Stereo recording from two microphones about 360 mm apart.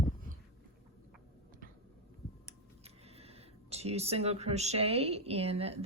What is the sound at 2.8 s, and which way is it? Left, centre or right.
Speech, centre.